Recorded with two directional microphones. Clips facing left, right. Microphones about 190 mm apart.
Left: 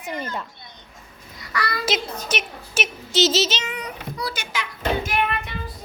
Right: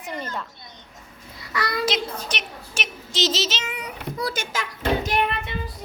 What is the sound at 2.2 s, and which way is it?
Speech, 5° left (ahead or behind).